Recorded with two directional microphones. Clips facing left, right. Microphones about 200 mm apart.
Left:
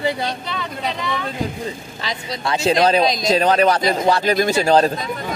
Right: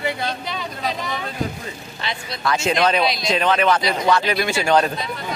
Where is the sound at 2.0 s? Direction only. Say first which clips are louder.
Right 1 dB; 35° left (ahead or behind).